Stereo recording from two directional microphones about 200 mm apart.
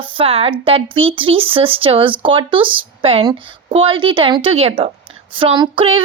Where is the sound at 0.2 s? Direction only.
30° right (ahead or behind).